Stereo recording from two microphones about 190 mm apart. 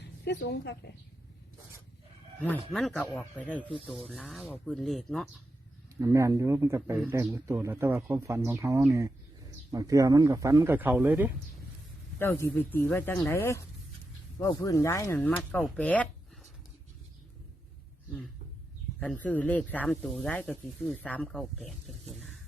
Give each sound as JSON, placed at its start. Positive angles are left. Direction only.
{"t": 0.3, "sound": "a woman's voice", "side_deg": 65}
{"t": 2.4, "sound": "speech", "side_deg": 5}
{"t": 6.0, "sound": "speech", "side_deg": -15}
{"t": 12.2, "sound": "speech", "side_deg": 10}
{"t": 18.9, "sound": "speech", "side_deg": 5}